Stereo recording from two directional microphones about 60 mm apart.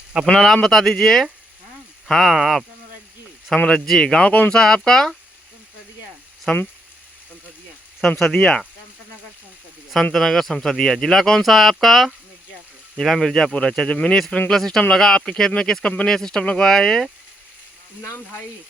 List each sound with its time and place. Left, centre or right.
0.3 s speech: centre
3.5 s speech: centre
4.5 s speech: centre
6.5 s speech: centre
8.3 s speech: centre
9.9 s speech: centre; by 14.5 s left
14.5 s speech: centre
18.0 s speech: left